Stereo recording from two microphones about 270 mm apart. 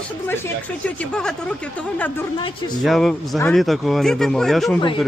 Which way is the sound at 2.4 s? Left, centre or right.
Centre.